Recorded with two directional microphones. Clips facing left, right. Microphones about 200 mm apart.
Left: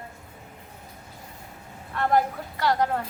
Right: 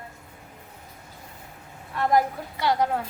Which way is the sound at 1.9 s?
10° right (ahead or behind).